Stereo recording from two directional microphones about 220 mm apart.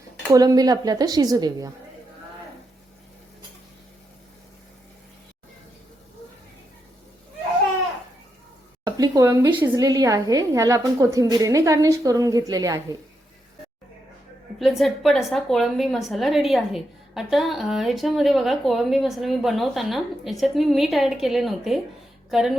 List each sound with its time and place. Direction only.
0.3 s a woman's voice: 15° right (ahead or behind)
8.8 s a woman's voice: 15° right (ahead or behind)
14.6 s a woman's voice: centre (ahead or behind)